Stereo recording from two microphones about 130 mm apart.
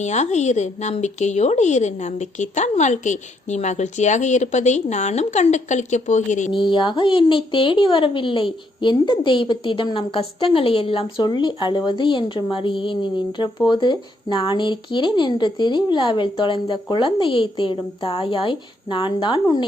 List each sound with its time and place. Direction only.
0.0 s speech: 60° left (ahead or behind)
6.5 s speech: 40° left (ahead or behind)
11.2 s speech: 35° left (ahead or behind)